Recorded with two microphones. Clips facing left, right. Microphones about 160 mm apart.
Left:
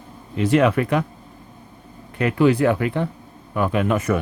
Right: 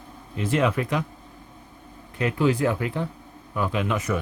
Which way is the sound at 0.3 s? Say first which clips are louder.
Left 6 dB; 70° left (ahead or behind).